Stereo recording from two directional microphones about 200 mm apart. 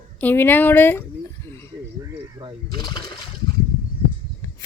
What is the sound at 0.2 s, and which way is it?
Speech, 10° left (ahead or behind).